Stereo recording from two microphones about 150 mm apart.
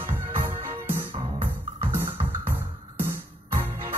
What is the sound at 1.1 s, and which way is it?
Music, 35° right (ahead or behind).